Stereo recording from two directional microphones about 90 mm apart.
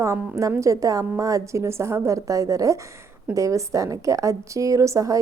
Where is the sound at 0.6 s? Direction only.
40° right (ahead or behind).